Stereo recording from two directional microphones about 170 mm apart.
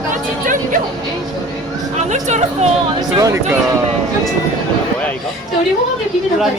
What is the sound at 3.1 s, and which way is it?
Speech, 20° right (ahead or behind).